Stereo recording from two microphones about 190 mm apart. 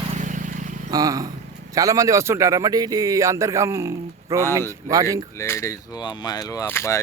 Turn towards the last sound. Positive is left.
turn(degrees=15)  # may be behind; listen again after turning